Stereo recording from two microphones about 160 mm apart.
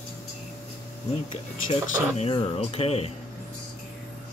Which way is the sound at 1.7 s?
35° left (ahead or behind).